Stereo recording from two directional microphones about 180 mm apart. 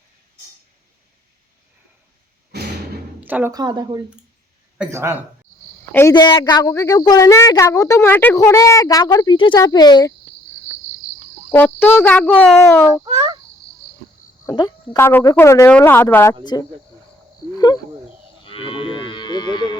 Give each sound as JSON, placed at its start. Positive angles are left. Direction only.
{"t": 3.2, "sound": "a sound", "side_deg": -10}
{"t": 3.5, "sound": "speech", "side_deg": -20}
{"t": 5.9, "sound": "speech", "side_deg": 15}
{"t": 6.1, "sound": "a woman's voice", "side_deg": 25}
{"t": 11.5, "sound": "speech", "side_deg": 10}
{"t": 13.1, "sound": "insect", "side_deg": -25}
{"t": 14.4, "sound": "speech", "side_deg": 20}
{"t": 16.4, "sound": "a woman's voice", "side_deg": 25}
{"t": 18.4, "sound": "cattle", "side_deg": 30}